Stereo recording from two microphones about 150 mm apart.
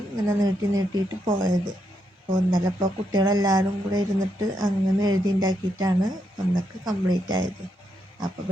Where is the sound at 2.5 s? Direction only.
30° right (ahead or behind).